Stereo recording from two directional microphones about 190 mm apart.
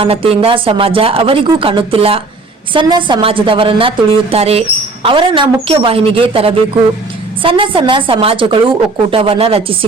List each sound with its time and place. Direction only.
0.0 s a woman's voice: 30° right (ahead or behind)